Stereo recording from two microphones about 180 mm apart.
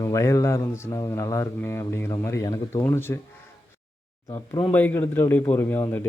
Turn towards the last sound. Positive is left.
turn(degrees=15)  # may be behind; listen again after turning